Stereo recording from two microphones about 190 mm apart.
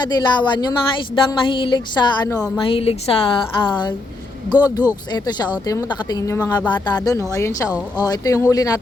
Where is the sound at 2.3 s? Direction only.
5° left (ahead or behind).